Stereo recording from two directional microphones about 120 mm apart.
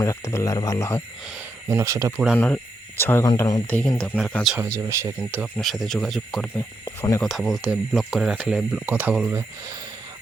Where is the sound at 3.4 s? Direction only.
30° left (ahead or behind).